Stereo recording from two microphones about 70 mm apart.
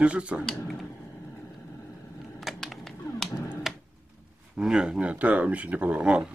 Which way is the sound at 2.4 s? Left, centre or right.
Centre.